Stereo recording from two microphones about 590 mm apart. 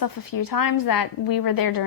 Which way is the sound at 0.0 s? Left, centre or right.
Left.